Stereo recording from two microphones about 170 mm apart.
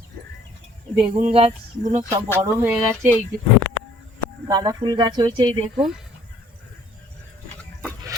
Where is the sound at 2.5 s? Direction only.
15° right (ahead or behind).